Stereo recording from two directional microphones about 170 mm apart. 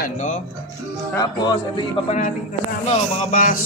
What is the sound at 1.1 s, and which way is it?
Speech, 25° left (ahead or behind).